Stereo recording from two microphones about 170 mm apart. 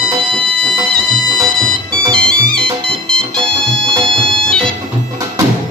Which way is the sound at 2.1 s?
5° left (ahead or behind).